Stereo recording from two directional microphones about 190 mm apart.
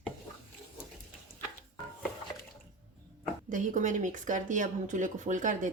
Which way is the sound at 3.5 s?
40° right (ahead or behind).